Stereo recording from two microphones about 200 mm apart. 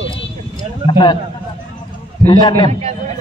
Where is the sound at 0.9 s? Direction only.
25° left (ahead or behind).